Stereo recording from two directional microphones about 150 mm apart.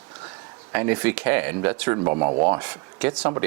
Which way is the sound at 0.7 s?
15° right (ahead or behind).